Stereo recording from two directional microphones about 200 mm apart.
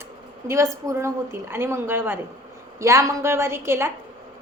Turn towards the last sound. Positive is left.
turn(degrees=-15)  # may be behind; listen again after turning